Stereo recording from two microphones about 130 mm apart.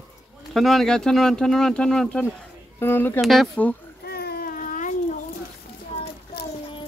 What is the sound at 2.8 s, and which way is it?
Speech, 15° left (ahead or behind).